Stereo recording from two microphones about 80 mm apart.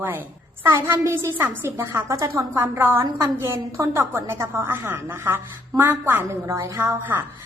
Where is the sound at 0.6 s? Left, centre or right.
Right.